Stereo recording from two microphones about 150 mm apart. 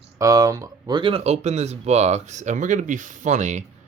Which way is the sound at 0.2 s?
20° right (ahead or behind).